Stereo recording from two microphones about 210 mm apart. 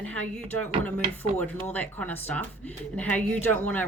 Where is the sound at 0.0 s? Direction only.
70° right (ahead or behind).